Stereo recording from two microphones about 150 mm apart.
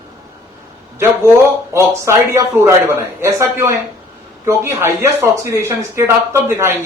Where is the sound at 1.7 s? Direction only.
20° right (ahead or behind).